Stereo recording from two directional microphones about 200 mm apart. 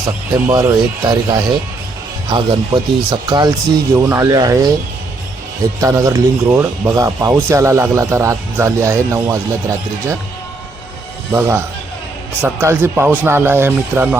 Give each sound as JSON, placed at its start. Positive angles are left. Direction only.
{"t": 0.0, "sound": "speech", "side_deg": -15}
{"t": 5.8, "sound": "speech", "side_deg": -15}
{"t": 11.3, "sound": "speech", "side_deg": -10}